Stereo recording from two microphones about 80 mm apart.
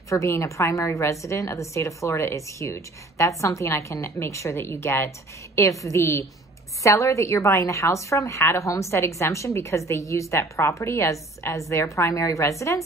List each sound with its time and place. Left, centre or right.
0.1 s a woman's voice: left